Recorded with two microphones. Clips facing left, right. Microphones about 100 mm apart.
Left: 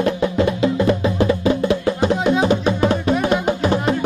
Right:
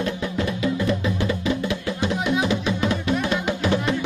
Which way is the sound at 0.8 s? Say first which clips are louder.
Left 6 dB; 35° left (ahead or behind).